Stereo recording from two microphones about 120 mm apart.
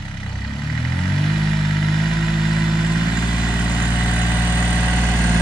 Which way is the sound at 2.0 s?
5° right (ahead or behind).